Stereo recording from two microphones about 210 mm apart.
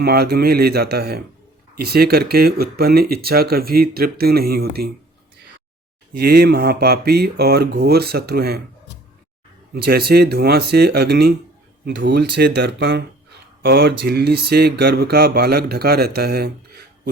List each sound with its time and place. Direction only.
0.0 s speech: 50° right (ahead or behind)
6.1 s speech: 50° right (ahead or behind)
9.7 s speech: 45° right (ahead or behind)